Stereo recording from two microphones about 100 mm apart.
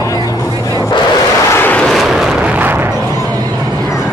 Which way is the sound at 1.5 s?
20° left (ahead or behind).